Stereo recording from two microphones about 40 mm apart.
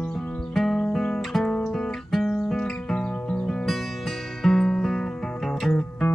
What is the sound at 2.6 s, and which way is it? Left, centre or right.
Music, centre.